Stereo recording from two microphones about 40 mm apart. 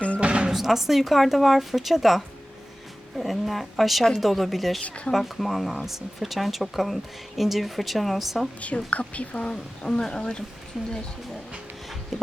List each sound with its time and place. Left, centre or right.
0.2 s a sound: right
0.5 s speech: centre
8.6 s a woman's voice: left
10.8 s speech: centre
12.1 s speech: centre